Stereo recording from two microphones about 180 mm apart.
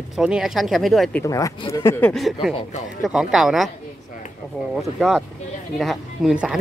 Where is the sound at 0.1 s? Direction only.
5° right (ahead or behind).